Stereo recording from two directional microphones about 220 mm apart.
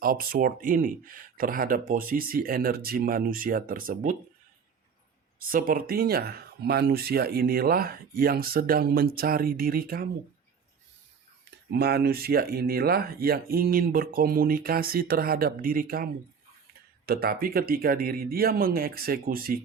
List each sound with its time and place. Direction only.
0.0 s speech: 40° right (ahead or behind)
5.4 s speech: 40° right (ahead or behind)
11.7 s speech: 45° right (ahead or behind)
17.1 s speech: 45° right (ahead or behind)